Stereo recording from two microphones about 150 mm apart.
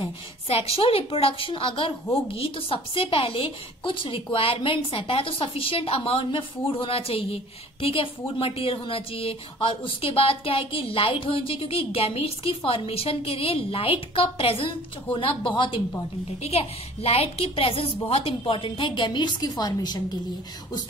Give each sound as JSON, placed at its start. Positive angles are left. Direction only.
{"t": 0.0, "sound": "a woman's voice", "side_deg": 40}